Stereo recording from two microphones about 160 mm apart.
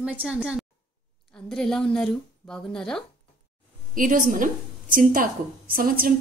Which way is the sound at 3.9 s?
55° right (ahead or behind).